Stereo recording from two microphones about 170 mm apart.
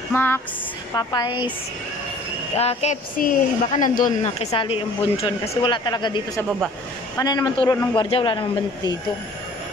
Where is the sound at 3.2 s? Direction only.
50° left (ahead or behind); by 8.9 s 30° left (ahead or behind).